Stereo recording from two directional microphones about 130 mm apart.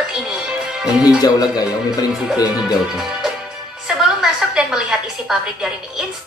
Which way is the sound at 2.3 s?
5° right (ahead or behind).